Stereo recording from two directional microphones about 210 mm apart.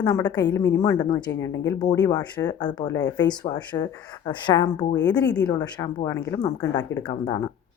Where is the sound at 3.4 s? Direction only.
20° left (ahead or behind).